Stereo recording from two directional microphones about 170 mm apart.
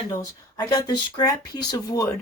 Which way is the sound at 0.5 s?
25° left (ahead or behind).